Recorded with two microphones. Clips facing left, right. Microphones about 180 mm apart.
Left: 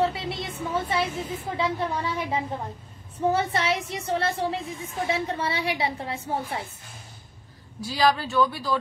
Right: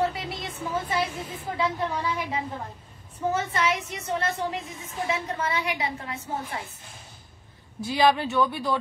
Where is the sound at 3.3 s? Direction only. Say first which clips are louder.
Left 2 dB; 30° left (ahead or behind).